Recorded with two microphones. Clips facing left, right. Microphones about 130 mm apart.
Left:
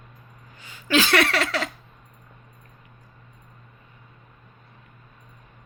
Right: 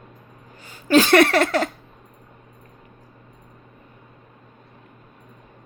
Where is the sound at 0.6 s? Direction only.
40° right (ahead or behind).